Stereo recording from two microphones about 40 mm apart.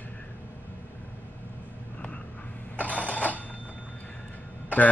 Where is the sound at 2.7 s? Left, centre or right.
Left.